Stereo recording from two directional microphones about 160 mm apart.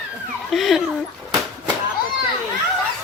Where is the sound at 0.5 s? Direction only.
Centre (ahead or behind).